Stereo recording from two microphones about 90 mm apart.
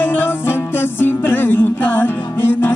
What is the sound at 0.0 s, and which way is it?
Music, 25° left (ahead or behind).